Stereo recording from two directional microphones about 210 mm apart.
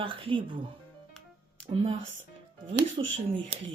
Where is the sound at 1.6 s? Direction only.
25° right (ahead or behind).